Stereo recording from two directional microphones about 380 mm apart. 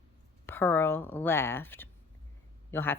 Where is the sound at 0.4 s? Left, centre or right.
Centre.